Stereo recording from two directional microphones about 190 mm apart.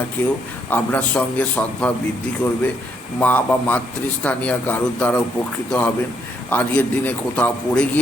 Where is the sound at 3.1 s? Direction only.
10° left (ahead or behind).